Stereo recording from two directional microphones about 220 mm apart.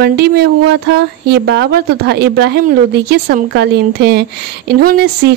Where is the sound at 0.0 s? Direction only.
45° right (ahead or behind).